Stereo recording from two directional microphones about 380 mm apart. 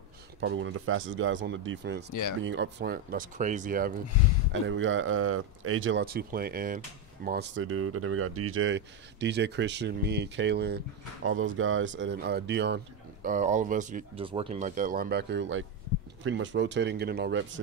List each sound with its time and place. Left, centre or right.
0.4 s speech: right